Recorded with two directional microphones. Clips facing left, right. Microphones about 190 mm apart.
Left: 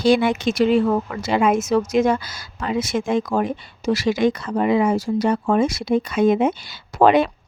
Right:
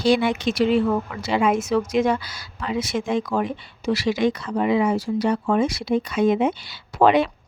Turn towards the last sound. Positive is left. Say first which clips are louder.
# left 2 dB
turn(degrees=45)  # may be behind; listen again after turning